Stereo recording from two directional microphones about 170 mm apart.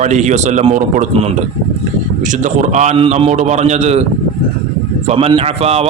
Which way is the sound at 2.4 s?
45° right (ahead or behind).